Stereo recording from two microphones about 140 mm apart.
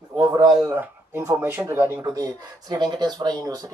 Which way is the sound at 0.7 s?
15° right (ahead or behind).